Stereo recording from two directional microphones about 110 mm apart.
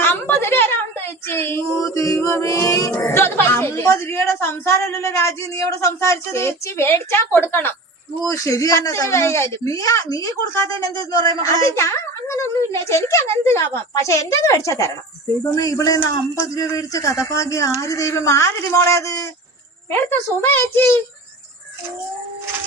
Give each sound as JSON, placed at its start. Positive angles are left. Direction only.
{"t": 0.0, "sound": "a child's voice", "side_deg": 20}
{"t": 3.0, "sound": "a woman's voice", "side_deg": 20}
{"t": 8.2, "sound": "a woman's voice", "side_deg": 30}
{"t": 19.9, "sound": "a woman's voice", "side_deg": 20}